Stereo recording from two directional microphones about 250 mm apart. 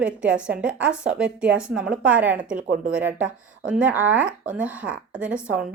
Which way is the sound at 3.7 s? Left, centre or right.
Centre.